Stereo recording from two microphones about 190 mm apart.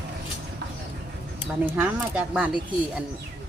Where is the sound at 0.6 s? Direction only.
65° right (ahead or behind).